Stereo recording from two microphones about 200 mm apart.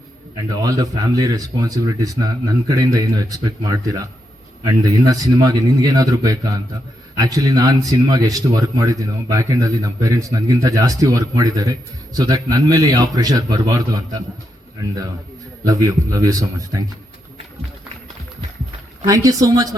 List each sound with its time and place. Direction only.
0.5 s speech: 20° right (ahead or behind)
15.6 s speech: 15° right (ahead or behind)
19.0 s speech: 15° right (ahead or behind)